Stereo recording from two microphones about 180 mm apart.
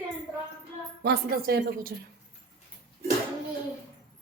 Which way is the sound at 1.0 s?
60° right (ahead or behind).